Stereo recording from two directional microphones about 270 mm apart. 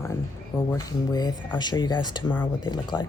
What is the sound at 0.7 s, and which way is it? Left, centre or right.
Speech, centre.